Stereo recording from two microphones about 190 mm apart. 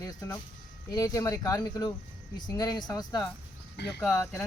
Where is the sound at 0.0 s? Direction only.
20° left (ahead or behind).